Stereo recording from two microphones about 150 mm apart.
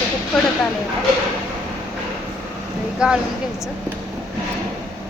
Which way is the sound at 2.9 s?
5° right (ahead or behind).